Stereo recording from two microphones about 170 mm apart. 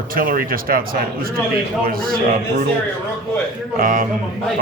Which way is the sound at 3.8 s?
55° right (ahead or behind).